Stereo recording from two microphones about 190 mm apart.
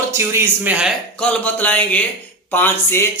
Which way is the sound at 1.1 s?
5° left (ahead or behind).